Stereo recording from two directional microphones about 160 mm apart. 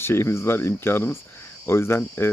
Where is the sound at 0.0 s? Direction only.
15° left (ahead or behind).